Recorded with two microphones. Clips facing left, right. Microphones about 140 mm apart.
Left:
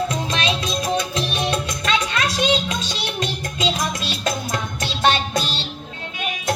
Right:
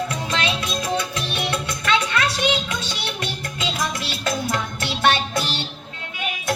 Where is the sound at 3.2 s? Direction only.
20° left (ahead or behind).